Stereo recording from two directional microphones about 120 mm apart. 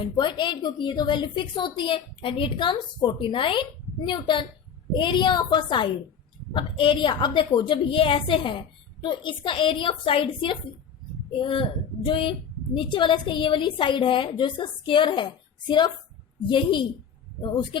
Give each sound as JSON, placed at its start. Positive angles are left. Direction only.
{"t": 0.2, "sound": "a woman's voice", "side_deg": 40}